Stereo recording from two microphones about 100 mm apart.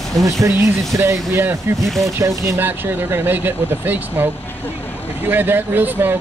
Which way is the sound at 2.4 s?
30° right (ahead or behind).